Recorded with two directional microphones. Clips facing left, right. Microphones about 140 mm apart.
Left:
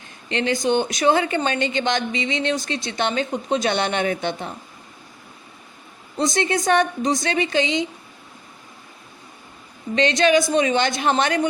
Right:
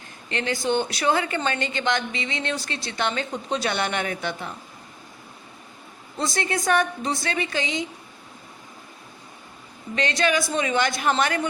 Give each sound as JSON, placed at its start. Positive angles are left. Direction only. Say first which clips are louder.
{"t": 0.3, "sound": "a woman's voice", "louder": "left 4 dB", "side_deg": 20}
{"t": 6.1, "sound": "a woman's voice", "louder": "left 5 dB", "side_deg": 20}
{"t": 9.9, "sound": "a woman's voice", "louder": "left 6 dB", "side_deg": 20}